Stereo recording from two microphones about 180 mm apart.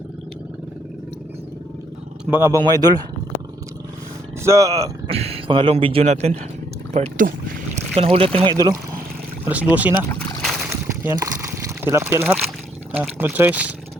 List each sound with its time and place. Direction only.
2.3 s speech: 15° right (ahead or behind)
4.4 s speech: 20° right (ahead or behind)
5.1 s speech: 35° right (ahead or behind)
8.5 s speech: 20° right (ahead or behind)
9.5 s speech: 10° right (ahead or behind)
10.1 s rowboat: 5° left (ahead or behind)
11.0 s a sound: 15° right (ahead or behind)
12.2 s speech: centre (ahead or behind)